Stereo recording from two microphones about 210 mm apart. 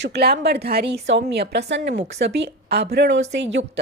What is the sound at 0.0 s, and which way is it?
A woman's voice, 50° right (ahead or behind).